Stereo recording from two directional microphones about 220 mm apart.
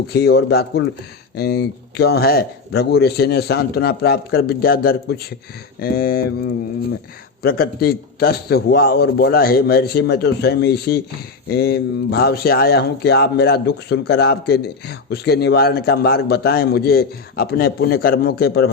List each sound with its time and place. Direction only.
0.1 s speech: 45° left (ahead or behind)
5.8 s mantra: 40° left (ahead or behind)
7.4 s speech: 45° left (ahead or behind)